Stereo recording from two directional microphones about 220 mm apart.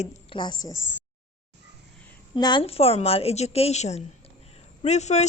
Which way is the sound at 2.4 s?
20° left (ahead or behind).